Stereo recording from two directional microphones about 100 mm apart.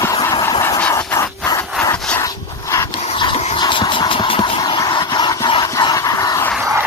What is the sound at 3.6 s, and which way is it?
Engine, 50° left (ahead or behind).